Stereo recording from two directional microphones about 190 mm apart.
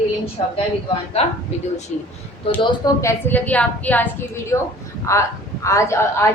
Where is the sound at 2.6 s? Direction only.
15° left (ahead or behind).